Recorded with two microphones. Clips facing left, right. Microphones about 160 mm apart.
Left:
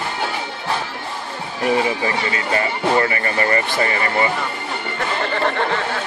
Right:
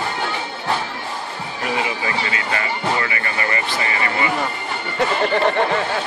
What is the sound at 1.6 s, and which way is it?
Speech, 40° left (ahead or behind).